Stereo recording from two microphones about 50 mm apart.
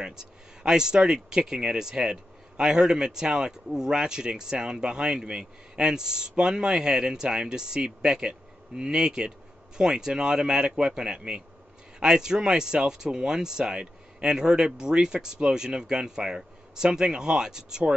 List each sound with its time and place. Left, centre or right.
0.0 s speech: centre